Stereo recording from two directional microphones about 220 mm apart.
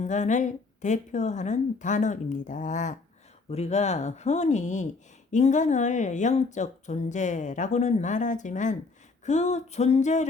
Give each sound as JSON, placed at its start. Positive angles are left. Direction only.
{"t": 0.0, "sound": "speech", "side_deg": 35}